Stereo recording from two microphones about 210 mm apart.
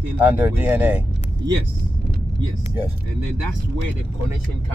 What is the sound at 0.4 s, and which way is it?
Speech, 5° right (ahead or behind).